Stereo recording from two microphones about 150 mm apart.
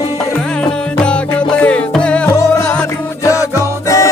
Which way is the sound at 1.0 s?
10° left (ahead or behind).